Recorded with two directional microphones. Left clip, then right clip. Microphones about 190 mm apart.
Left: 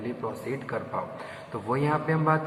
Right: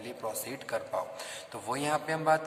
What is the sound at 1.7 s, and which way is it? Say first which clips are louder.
Speech: left 4 dB; 90° right.